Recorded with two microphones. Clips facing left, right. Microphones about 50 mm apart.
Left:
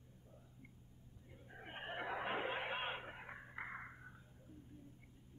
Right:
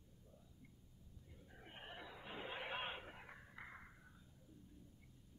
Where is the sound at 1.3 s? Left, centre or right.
Left.